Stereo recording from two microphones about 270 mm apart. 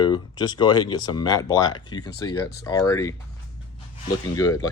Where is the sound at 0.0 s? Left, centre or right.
Centre.